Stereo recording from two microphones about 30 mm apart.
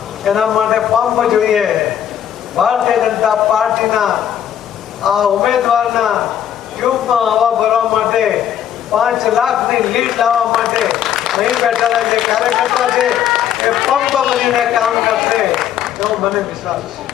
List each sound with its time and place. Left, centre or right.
0.3 s a man's voice: centre
10.7 s applause: centre
11.2 s a sound: centre
11.6 s a man's voice: centre